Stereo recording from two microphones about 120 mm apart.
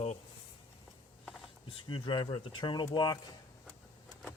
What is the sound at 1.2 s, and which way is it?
Pulleys, centre (ahead or behind).